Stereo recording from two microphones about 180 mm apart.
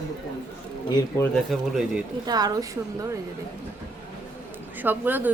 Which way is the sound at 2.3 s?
20° right (ahead or behind).